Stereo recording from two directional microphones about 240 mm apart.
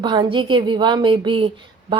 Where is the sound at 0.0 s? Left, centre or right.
Centre.